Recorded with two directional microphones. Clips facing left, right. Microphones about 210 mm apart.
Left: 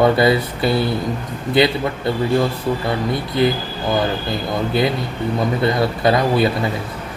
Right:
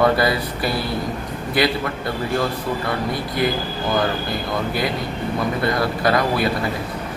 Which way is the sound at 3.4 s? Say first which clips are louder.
Left 5 dB; 25° left (ahead or behind).